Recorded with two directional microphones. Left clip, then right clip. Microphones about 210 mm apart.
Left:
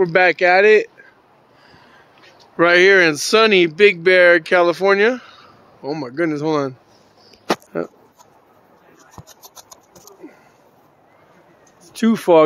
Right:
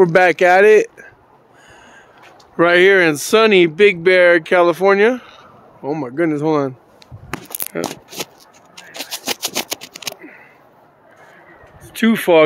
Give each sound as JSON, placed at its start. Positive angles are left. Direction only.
{"t": 0.0, "sound": "speech", "side_deg": -30}
{"t": 2.5, "sound": "speech", "side_deg": -5}
{"t": 7.7, "sound": "speech", "side_deg": 10}
{"t": 11.9, "sound": "speech", "side_deg": 10}